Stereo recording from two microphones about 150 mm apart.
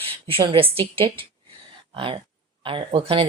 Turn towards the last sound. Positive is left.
turn(degrees=-35)  # may be behind; listen again after turning